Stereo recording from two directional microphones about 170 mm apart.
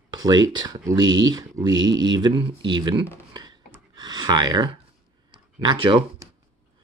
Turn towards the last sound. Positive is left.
turn(degrees=-30)  # may be behind; listen again after turning